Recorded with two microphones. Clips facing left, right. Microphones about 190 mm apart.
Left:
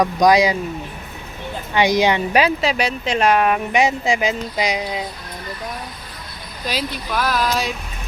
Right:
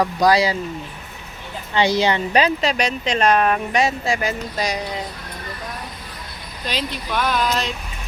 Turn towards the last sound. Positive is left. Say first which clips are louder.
# left 1 dB
turn(degrees=5)  # may be behind; listen again after turning